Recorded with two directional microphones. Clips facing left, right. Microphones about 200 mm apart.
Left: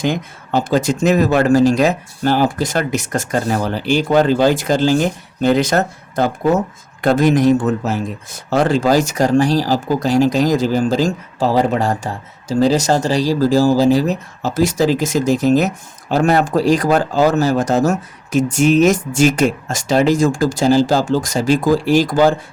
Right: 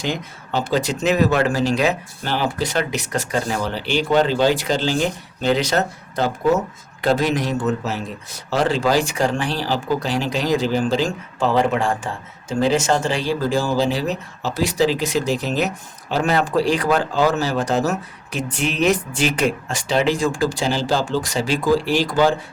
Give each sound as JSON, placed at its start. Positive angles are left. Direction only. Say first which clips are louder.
{"t": 0.0, "sound": "speech", "louder": "left 6 dB", "side_deg": 50}